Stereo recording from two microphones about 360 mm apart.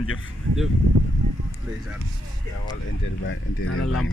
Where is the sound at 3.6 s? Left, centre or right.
Left.